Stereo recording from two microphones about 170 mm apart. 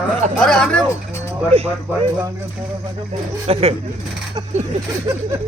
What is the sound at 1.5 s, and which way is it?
Speech, 35° right (ahead or behind).